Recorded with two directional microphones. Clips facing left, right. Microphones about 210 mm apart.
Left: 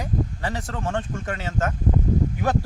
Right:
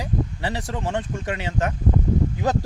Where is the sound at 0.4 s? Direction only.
20° right (ahead or behind).